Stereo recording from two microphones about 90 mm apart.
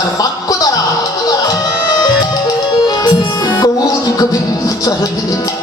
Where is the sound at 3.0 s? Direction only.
45° left (ahead or behind).